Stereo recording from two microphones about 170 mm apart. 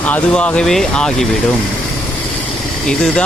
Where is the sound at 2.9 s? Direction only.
5° left (ahead or behind).